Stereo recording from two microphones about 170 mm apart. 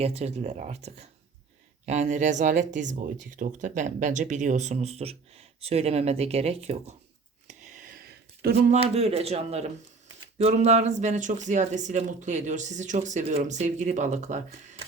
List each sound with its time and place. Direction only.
0.0 s speech: 40° right (ahead or behind)
7.4 s a sound: 50° right (ahead or behind)
8.7 s speech: 35° right (ahead or behind)